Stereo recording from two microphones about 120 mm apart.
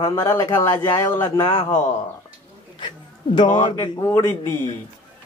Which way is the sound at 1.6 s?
20° left (ahead or behind).